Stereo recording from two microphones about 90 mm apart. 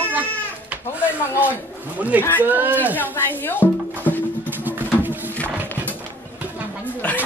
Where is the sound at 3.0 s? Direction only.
20° left (ahead or behind).